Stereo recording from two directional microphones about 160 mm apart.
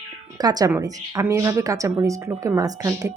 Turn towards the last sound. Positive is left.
turn(degrees=-20)  # may be behind; listen again after turning